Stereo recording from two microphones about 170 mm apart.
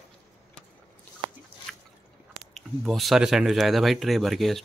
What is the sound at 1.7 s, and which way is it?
Drip, 5° left (ahead or behind).